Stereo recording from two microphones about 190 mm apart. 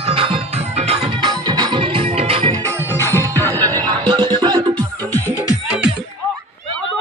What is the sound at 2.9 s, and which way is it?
Music, 15° left (ahead or behind).